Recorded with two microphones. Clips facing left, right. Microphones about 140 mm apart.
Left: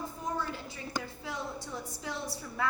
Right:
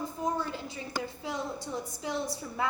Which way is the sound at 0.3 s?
20° right (ahead or behind).